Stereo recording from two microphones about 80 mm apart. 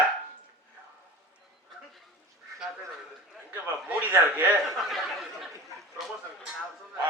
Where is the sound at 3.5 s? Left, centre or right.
Right.